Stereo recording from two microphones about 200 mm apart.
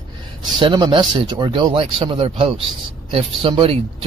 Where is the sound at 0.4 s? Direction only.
20° right (ahead or behind).